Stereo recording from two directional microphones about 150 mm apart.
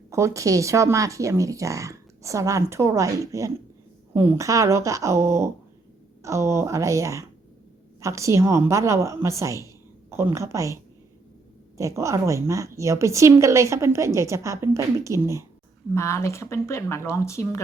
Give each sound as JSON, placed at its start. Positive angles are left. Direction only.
{"t": 0.1, "sound": "speech", "side_deg": -20}
{"t": 11.8, "sound": "speech", "side_deg": -20}
{"t": 16.0, "sound": "speech", "side_deg": 20}